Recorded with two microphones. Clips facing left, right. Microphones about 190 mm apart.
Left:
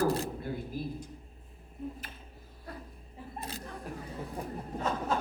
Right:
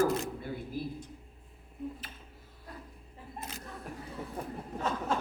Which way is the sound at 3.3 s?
35° left (ahead or behind).